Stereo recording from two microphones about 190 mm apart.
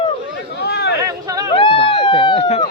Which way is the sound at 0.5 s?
60° left (ahead or behind).